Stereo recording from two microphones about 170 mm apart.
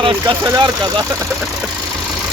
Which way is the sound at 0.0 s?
25° right (ahead or behind).